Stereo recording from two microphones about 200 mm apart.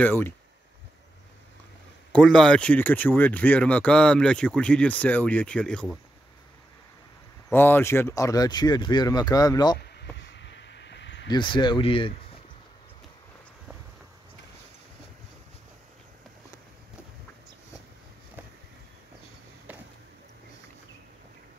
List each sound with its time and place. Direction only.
0.0 s speech: 10° left (ahead or behind)
2.1 s speech: 5° left (ahead or behind)
7.4 s speech: 10° left (ahead or behind)
10.1 s a sound: 60° left (ahead or behind)
11.2 s speech: 25° left (ahead or behind)